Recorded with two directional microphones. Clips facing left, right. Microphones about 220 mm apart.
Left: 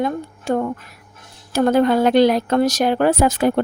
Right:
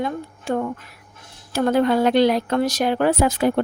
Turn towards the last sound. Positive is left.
turn(degrees=45)  # may be behind; listen again after turning